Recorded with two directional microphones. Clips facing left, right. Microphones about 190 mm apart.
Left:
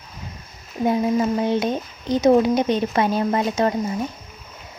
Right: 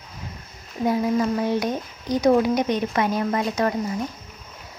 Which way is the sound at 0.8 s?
20° left (ahead or behind).